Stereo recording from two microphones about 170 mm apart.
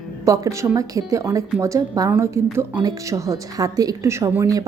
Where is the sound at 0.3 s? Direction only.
15° right (ahead or behind).